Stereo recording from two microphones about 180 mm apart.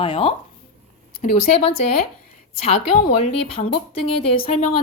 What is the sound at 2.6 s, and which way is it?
A woman's voice, 35° left (ahead or behind).